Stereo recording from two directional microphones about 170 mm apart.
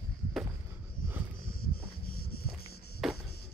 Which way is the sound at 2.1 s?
65° left (ahead or behind).